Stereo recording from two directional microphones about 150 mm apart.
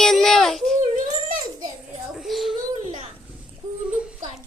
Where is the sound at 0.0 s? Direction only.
Centre (ahead or behind).